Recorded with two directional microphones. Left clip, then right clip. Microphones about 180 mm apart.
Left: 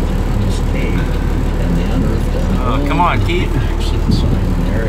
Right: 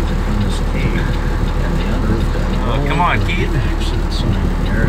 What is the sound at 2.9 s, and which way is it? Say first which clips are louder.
Vehicle: left 1 dB; 20° left (ahead or behind).